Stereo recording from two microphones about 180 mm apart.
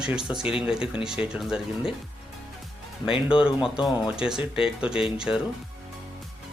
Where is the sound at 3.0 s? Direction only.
5° right (ahead or behind).